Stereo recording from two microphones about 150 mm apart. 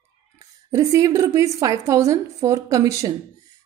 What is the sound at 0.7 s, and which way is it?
A woman's voice, 20° right (ahead or behind).